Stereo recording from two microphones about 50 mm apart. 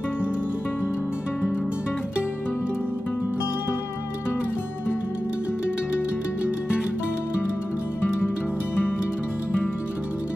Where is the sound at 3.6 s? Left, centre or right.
Left.